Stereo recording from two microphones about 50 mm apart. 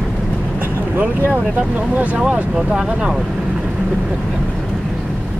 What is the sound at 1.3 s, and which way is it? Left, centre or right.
Speech, right.